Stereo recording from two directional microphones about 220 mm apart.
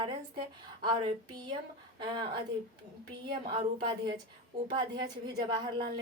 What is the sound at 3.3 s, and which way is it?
Speech, 20° right (ahead or behind).